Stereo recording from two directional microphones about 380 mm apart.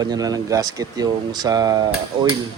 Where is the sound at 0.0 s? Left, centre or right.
Centre.